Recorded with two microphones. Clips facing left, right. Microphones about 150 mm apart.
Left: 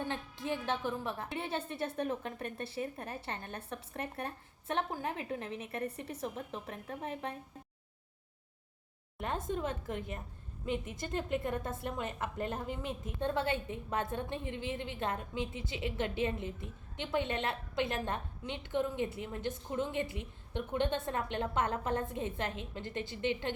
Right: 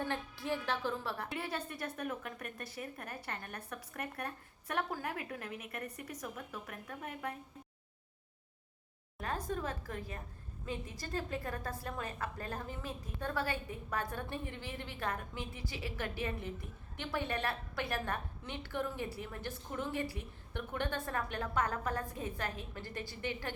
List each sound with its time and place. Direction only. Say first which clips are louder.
0.0 s a woman's voice: even; 20° left (ahead or behind)
9.1 s a woman's voice: left 2 dB; 25° left (ahead or behind)